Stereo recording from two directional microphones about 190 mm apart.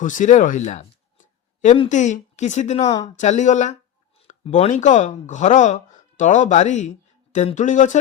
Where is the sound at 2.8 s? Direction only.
20° left (ahead or behind).